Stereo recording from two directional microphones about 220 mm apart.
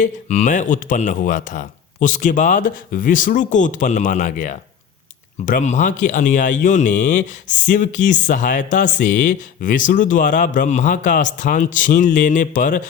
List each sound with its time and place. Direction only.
0.0 s a man's voice: 30° left (ahead or behind)